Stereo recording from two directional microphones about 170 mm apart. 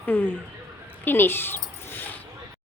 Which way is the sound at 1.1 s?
10° left (ahead or behind).